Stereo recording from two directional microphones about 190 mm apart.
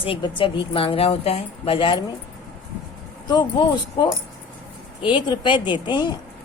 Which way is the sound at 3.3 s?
20° left (ahead or behind).